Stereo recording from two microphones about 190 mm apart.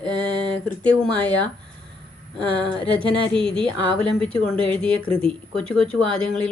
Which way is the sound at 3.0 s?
25° right (ahead or behind).